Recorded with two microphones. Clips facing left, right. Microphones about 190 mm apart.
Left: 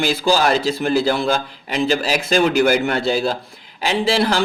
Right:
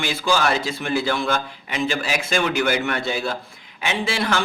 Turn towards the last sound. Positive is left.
turn(degrees=35)  # may be behind; listen again after turning